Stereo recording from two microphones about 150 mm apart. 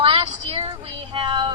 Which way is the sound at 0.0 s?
40° right (ahead or behind).